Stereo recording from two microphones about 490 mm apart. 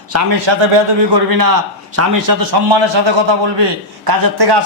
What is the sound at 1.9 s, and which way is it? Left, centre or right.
Speech, right.